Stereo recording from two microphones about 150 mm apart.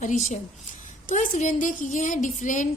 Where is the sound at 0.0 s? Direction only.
60° left (ahead or behind).